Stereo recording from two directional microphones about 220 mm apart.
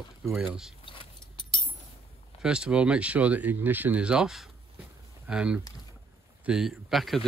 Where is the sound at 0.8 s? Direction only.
25° left (ahead or behind).